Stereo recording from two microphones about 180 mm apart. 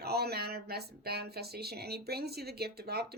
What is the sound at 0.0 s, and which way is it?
A woman's voice, 60° right (ahead or behind).